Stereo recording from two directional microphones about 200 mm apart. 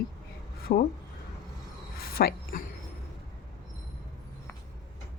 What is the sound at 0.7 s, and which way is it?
Speech, 45° left (ahead or behind).